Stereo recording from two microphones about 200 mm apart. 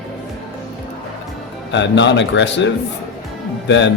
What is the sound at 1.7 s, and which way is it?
Speech, 60° left (ahead or behind).